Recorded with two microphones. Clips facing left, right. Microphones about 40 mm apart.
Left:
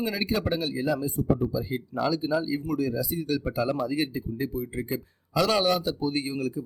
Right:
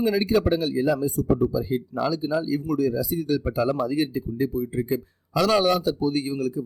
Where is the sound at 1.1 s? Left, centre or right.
Right.